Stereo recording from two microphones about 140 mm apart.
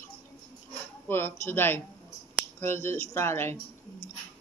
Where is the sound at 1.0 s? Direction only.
15° left (ahead or behind).